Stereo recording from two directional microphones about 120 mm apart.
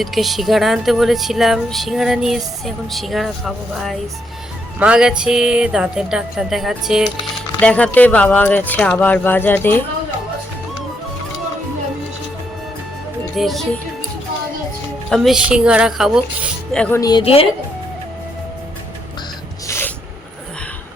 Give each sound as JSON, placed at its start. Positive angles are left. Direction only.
{"t": 0.0, "sound": "speech", "side_deg": 0}
{"t": 7.6, "sound": "speech", "side_deg": 10}
{"t": 13.3, "sound": "speech", "side_deg": 0}
{"t": 15.1, "sound": "speech", "side_deg": 0}
{"t": 16.9, "sound": "a woman's voice", "side_deg": 30}
{"t": 19.6, "sound": "spray", "side_deg": 20}